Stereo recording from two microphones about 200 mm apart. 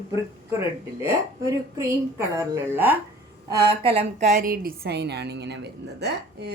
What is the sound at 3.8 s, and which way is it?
A woman's voice, 30° right (ahead or behind).